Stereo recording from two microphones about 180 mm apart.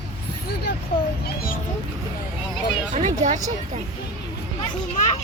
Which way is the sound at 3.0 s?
45° right (ahead or behind).